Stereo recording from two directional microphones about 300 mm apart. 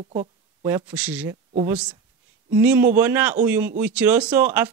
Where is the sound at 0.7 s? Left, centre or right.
Centre.